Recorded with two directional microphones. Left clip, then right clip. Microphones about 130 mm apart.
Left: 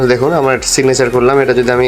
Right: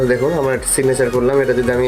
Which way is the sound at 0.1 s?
30° left (ahead or behind).